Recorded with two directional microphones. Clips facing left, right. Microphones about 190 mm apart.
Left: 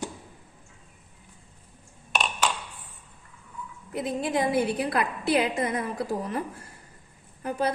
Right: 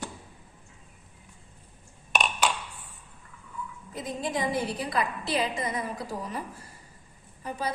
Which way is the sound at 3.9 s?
60° left (ahead or behind).